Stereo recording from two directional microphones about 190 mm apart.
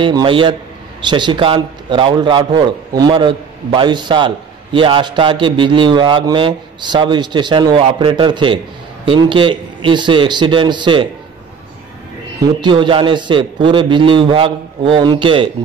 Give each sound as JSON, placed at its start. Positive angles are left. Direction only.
{"t": 0.0, "sound": "a man's voice", "side_deg": -25}
{"t": 12.5, "sound": "a man's voice", "side_deg": -25}